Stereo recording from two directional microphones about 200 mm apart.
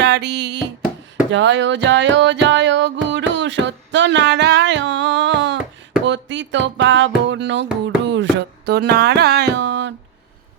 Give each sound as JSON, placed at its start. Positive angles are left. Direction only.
{"t": 0.0, "sound": "music", "side_deg": -60}
{"t": 6.1, "sound": "speech", "side_deg": -65}
{"t": 7.3, "sound": "music", "side_deg": -65}